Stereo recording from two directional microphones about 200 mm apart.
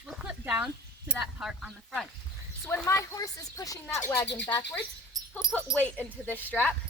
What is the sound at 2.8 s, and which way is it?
Speech, 15° left (ahead or behind).